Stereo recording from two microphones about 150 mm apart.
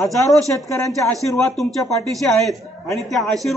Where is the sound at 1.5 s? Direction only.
Centre (ahead or behind).